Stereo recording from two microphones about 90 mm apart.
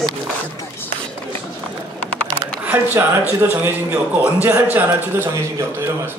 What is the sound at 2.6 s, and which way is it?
A man's voice, 20° right (ahead or behind).